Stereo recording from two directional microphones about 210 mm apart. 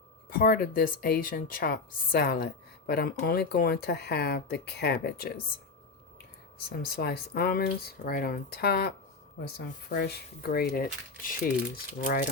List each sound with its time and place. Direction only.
0.3 s speech: 45° left (ahead or behind)
6.7 s speech: 45° left (ahead or behind)